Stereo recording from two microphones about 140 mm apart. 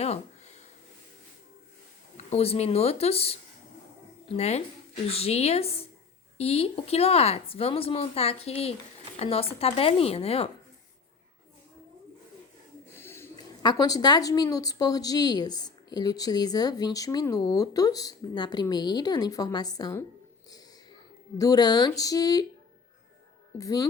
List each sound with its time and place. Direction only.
2.1 s speech: 45° left (ahead or behind)
13.0 s a sound: 15° left (ahead or behind)
13.6 s a woman's voice: 30° left (ahead or behind)
21.3 s a woman's voice: 25° left (ahead or behind)
23.6 s a woman's voice: 25° left (ahead or behind)